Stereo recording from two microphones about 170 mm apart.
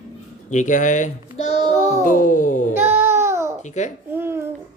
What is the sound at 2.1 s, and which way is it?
Music, 50° left (ahead or behind).